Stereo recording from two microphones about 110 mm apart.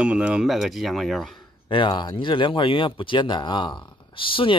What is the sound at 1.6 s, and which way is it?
Speech, 45° left (ahead or behind).